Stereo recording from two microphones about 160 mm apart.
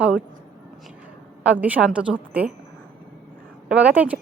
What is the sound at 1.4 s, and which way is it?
A woman's voice, 10° right (ahead or behind).